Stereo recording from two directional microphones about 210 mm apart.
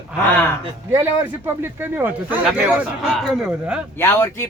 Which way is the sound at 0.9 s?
10° right (ahead or behind).